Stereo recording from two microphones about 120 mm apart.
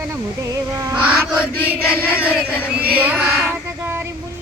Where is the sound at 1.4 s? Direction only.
20° left (ahead or behind).